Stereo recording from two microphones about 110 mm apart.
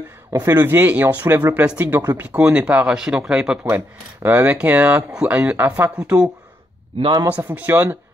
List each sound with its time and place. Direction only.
0.3 s speech: 25° right (ahead or behind)
7.0 s a man's voice: 45° right (ahead or behind)
7.3 s speech: 15° right (ahead or behind)